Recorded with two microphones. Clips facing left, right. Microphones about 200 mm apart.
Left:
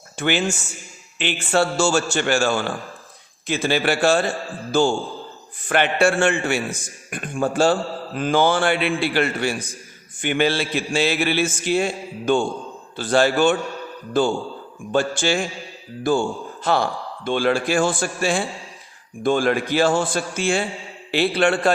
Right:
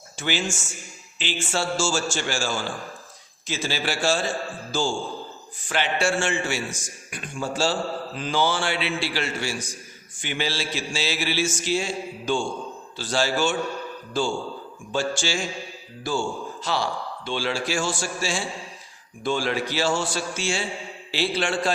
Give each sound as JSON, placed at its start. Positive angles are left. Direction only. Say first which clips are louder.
{"t": 0.2, "sound": "a man's voice", "louder": "left 6 dB", "side_deg": 60}